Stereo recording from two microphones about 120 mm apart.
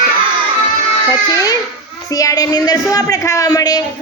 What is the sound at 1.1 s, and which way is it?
A woman's voice, 30° left (ahead or behind).